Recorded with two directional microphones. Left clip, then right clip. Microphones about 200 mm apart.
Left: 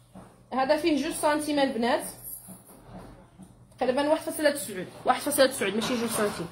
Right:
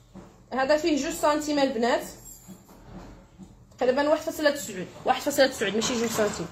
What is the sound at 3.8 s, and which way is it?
A woman's voice, centre (ahead or behind).